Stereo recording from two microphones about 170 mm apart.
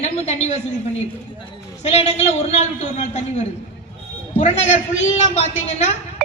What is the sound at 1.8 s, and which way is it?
A woman's voice, 40° left (ahead or behind).